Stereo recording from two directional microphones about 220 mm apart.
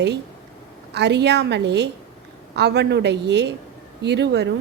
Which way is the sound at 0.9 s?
50° right (ahead or behind).